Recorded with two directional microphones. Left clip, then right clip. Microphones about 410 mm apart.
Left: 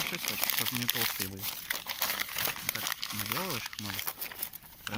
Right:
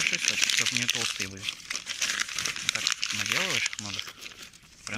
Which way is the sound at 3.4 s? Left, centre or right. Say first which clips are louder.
Right 8 dB; centre.